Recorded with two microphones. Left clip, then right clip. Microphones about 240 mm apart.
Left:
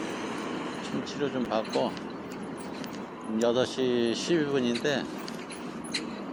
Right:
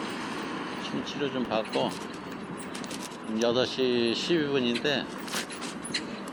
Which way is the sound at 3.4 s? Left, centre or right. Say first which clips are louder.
Even; centre.